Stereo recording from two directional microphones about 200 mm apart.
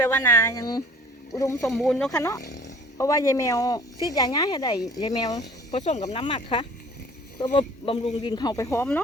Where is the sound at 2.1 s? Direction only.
15° left (ahead or behind).